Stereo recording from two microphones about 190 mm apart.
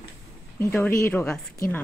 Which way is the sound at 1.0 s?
10° left (ahead or behind).